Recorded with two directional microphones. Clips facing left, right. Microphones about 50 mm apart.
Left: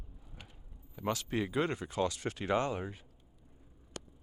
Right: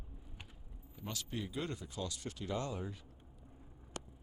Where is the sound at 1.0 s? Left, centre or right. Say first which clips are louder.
Left 9 dB; left.